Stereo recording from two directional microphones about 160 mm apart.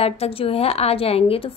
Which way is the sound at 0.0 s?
40° left (ahead or behind).